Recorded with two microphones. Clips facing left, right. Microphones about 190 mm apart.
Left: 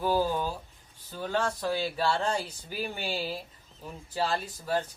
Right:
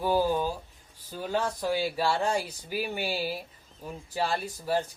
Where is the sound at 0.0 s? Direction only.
15° right (ahead or behind).